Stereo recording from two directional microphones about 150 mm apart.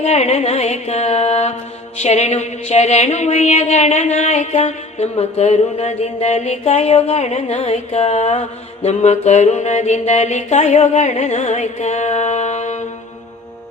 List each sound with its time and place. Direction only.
0.0 s music: 45° left (ahead or behind)